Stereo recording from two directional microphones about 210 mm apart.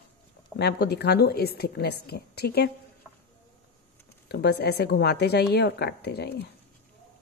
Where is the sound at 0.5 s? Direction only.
50° left (ahead or behind).